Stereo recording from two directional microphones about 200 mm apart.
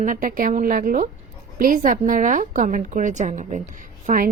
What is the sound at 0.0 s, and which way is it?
A woman's voice, 45° right (ahead or behind).